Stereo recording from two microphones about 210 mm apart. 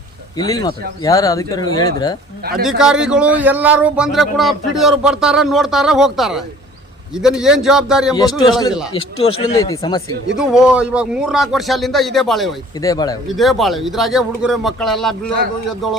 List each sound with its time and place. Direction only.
0.3 s speech: 20° left (ahead or behind)
2.6 s speech: 5° right (ahead or behind)
8.1 s a man's voice: 20° left (ahead or behind)
10.3 s speech: 5° right (ahead or behind)
12.8 s speech: 15° left (ahead or behind)
13.2 s speech: centre (ahead or behind)